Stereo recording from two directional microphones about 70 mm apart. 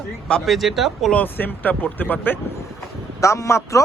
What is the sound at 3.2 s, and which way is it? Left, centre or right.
Speech, left.